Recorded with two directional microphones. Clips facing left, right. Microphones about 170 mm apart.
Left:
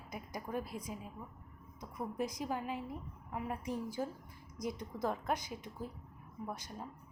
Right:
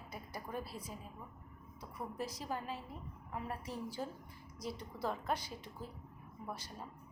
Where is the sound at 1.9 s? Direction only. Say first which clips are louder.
Left 4 dB; 15° left (ahead or behind).